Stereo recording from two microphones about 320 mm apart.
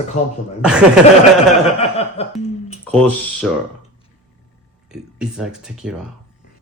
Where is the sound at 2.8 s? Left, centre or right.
Centre.